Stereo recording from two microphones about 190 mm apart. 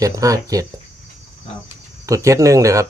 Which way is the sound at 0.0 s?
15° right (ahead or behind).